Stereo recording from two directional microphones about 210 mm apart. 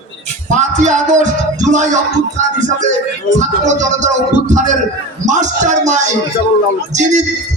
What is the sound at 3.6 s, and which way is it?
Music, 35° right (ahead or behind).